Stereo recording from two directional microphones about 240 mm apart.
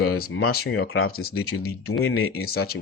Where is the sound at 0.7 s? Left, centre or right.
Left.